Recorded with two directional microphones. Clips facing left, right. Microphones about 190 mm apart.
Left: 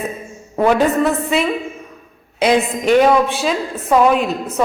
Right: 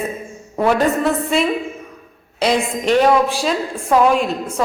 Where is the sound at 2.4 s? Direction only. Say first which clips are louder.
Left 3 dB; centre (ahead or behind).